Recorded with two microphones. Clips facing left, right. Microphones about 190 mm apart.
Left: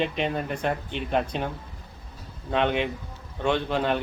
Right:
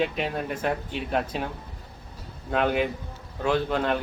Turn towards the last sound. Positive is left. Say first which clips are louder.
# even
turn(degrees=0)  # may be behind; listen again after turning